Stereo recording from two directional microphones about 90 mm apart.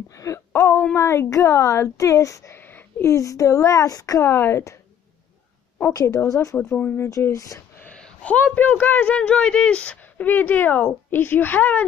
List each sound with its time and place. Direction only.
0.1 s a sound: 35° left (ahead or behind)
0.9 s speech: 30° left (ahead or behind)
5.9 s speech: 30° left (ahead or behind)
6.6 s speech: 15° left (ahead or behind)
7.1 s speech: 35° left (ahead or behind)
7.8 s speech: 15° left (ahead or behind)